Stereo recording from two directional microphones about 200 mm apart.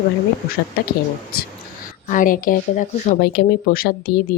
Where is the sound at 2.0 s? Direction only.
40° left (ahead or behind).